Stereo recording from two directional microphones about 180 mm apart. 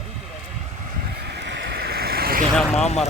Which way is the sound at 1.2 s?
70° right (ahead or behind).